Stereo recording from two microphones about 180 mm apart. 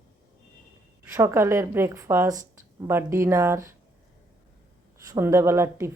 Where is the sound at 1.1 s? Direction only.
15° right (ahead or behind).